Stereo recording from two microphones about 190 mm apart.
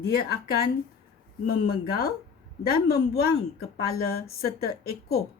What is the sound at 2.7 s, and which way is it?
Speech, 55° left (ahead or behind).